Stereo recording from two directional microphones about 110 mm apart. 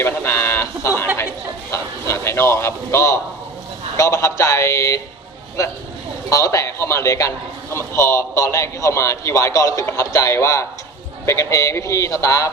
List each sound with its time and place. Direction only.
0.0 s a sound: 20° left (ahead or behind)
1.7 s a man's voice: 25° left (ahead or behind)
6.3 s a man's voice: 30° left (ahead or behind)